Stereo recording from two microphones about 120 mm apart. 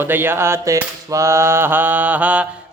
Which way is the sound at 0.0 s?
20° right (ahead or behind).